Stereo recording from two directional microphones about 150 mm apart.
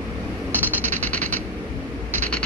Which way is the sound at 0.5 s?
10° right (ahead or behind).